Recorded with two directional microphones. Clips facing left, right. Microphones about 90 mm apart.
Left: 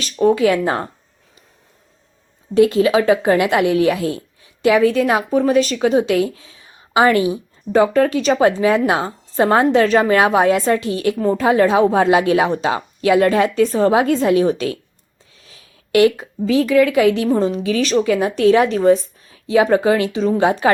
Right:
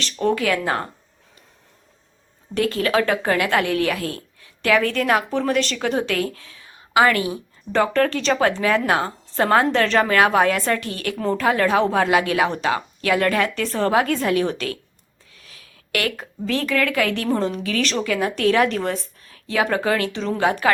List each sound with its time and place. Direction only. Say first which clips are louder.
0.0 s a woman's voice: left 7 dB; 15° left (ahead or behind)
2.6 s a woman's voice: left 7 dB; 20° left (ahead or behind)
11.2 s a woman's voice: left 4 dB; 10° left (ahead or behind)
15.4 s a sound: even; 25° left (ahead or behind)
16.5 s a woman's voice: left 8 dB; 15° left (ahead or behind)